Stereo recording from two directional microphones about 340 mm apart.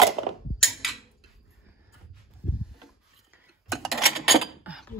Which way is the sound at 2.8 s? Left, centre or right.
Centre.